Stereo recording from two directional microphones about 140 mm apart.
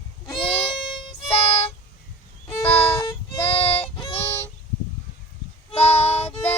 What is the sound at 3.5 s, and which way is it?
Music, 45° left (ahead or behind).